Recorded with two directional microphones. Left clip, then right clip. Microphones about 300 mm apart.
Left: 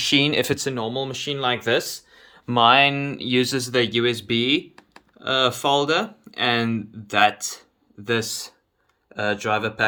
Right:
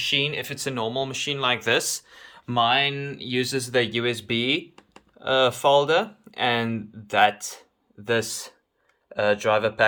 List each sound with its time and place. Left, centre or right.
0.0 s speech: centre
0.6 s speech: centre